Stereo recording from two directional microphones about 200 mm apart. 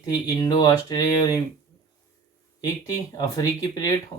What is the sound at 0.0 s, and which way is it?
Speech, 20° left (ahead or behind).